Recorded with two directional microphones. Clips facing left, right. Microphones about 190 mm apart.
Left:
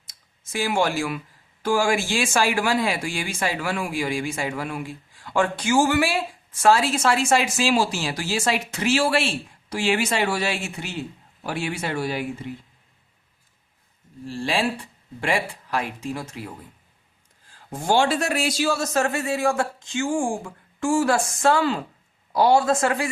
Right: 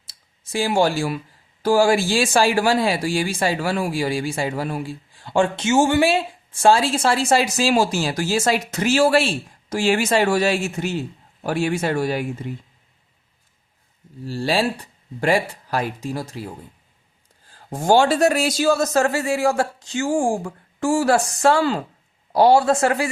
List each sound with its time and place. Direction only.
0.1 s speech: 30° right (ahead or behind); by 12.2 s 45° right (ahead or behind)
14.3 s speech: 35° right (ahead or behind)
17.5 s speech: 40° right (ahead or behind)